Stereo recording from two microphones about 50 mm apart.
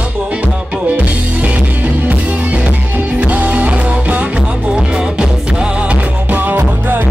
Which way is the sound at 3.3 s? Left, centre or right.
Right.